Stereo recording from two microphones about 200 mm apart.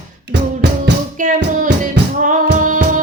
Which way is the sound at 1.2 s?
40° right (ahead or behind).